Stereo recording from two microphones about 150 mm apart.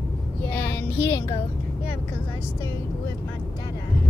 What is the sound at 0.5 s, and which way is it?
Speech, 10° left (ahead or behind).